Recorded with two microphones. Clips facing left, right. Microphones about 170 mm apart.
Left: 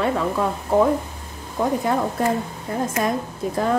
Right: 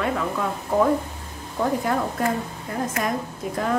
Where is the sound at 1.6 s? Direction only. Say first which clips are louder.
Left 2 dB; 15° left (ahead or behind).